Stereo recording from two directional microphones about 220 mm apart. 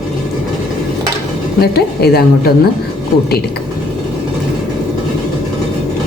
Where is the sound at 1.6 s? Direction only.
45° left (ahead or behind).